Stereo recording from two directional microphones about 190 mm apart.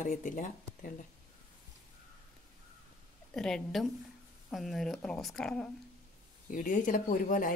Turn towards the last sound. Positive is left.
turn(degrees=45)  # may be behind; listen again after turning